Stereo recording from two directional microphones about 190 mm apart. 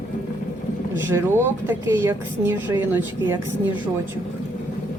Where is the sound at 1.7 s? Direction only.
10° right (ahead or behind).